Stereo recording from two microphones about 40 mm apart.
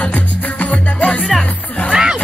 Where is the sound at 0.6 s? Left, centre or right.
Left.